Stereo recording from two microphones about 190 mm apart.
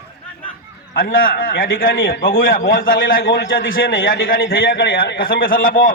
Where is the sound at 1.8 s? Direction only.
90° left.